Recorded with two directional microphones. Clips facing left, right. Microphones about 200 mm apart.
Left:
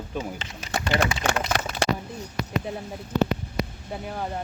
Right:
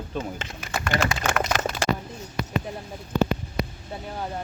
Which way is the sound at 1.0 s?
60° left (ahead or behind).